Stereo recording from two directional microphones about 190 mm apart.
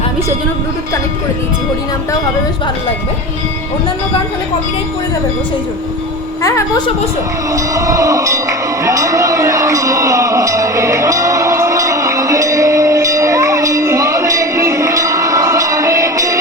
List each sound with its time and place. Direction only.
6.4 s a woman's voice: 20° left (ahead or behind)
7.5 s music: 15° right (ahead or behind)